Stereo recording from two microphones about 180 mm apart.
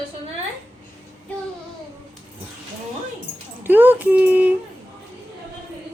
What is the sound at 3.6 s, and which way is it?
Speech, 10° right (ahead or behind).